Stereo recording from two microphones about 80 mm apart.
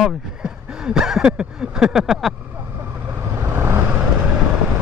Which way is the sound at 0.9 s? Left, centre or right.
Centre.